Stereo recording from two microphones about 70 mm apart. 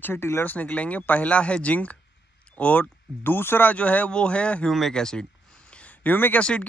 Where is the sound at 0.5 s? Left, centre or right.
Left.